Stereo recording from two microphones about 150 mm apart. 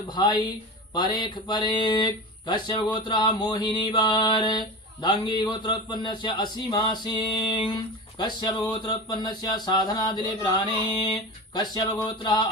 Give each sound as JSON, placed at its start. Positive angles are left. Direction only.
{"t": 0.1, "sound": "speech", "side_deg": 30}